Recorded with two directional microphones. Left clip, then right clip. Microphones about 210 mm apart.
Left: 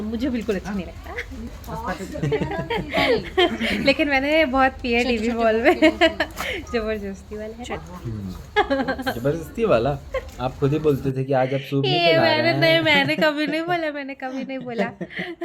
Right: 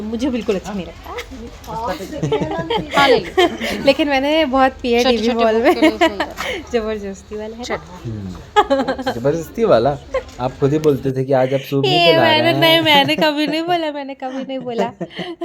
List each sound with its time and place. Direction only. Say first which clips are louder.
0.1 s a woman's voice: right 6 dB; 15° right (ahead or behind)
5.2 s a woman's voice: right 6 dB; 10° right (ahead or behind)
5.5 s a woman's voice: right 2 dB; 20° right (ahead or behind)
8.5 s a woman's voice: right 6 dB; 15° right (ahead or behind)